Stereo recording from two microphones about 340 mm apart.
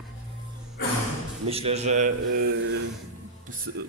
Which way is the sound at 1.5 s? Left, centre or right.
Centre.